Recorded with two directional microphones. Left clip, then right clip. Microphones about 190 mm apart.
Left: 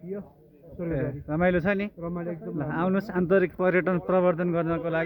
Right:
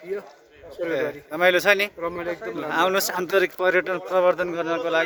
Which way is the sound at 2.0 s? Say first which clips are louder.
Right 6 dB; 25° right (ahead or behind).